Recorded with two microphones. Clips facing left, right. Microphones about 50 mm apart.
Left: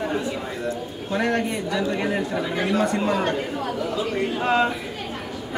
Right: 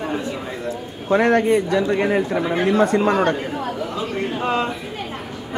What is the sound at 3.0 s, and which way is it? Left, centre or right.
Speech, right.